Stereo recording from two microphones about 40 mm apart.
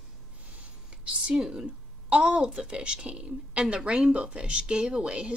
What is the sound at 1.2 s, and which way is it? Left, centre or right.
Speech, right.